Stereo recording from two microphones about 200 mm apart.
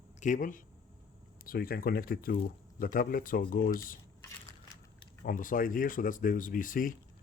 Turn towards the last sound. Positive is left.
turn(degrees=45)  # may be behind; listen again after turning